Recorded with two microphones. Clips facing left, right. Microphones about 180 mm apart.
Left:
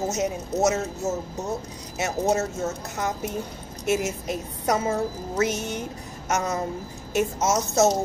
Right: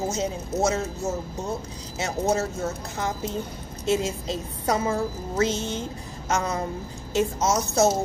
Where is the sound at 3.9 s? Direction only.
30° right (ahead or behind).